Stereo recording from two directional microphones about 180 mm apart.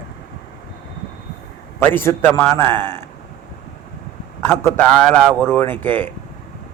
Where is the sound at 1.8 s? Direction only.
10° left (ahead or behind).